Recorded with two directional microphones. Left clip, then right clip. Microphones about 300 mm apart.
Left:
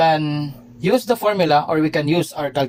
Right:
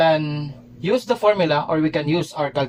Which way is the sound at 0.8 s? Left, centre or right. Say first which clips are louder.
Left 2 dB; left.